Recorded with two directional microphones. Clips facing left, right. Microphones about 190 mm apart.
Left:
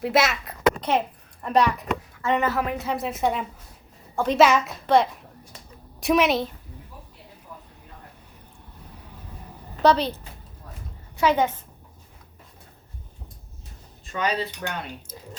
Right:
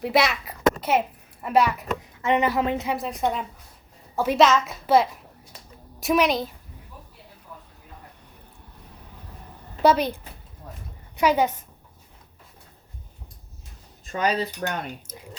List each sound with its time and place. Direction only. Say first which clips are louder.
0.0 s a woman's voice: even; centre (ahead or behind); by 2.9 s 20° right (ahead or behind)
2.9 s a child's voice: left 1 dB; centre (ahead or behind)
4.4 s a woman's voice: left 1 dB; 10° left (ahead or behind)
4.6 s a child's voice: even; 5° right (ahead or behind)
9.8 s a woman's voice: even; 10° right (ahead or behind)
11.2 s a woman's voice: even; 10° right (ahead or behind)
14.1 s speech: right 2 dB; 40° right (ahead or behind)